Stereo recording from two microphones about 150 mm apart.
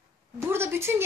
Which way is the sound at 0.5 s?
15° right (ahead or behind).